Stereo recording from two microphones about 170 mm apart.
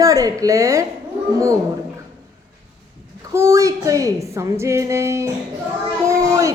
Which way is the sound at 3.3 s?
20° right (ahead or behind).